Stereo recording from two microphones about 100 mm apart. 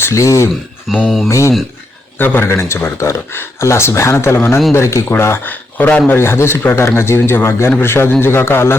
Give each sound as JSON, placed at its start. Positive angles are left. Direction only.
{"t": 0.0, "sound": "speech", "side_deg": 30}
{"t": 0.9, "sound": "a sound", "side_deg": -5}
{"t": 1.3, "sound": "speech", "side_deg": 30}
{"t": 2.1, "sound": "speech", "side_deg": 20}